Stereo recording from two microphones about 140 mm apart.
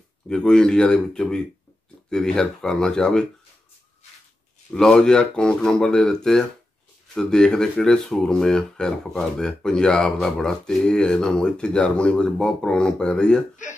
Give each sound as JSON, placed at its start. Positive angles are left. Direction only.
{"t": 0.3, "sound": "speech", "side_deg": 5}
{"t": 4.7, "sound": "speech", "side_deg": 5}
{"t": 13.6, "sound": "speech", "side_deg": 65}